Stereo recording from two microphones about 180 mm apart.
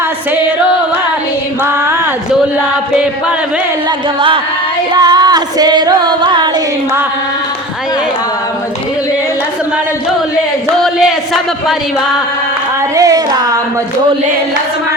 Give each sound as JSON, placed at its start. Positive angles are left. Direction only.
{"t": 4.9, "sound": "singing", "side_deg": -20}
{"t": 10.8, "sound": "a sound", "side_deg": 0}
{"t": 13.0, "sound": "singing", "side_deg": -20}